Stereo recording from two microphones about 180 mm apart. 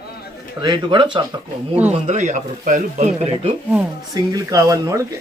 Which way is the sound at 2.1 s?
40° right (ahead or behind).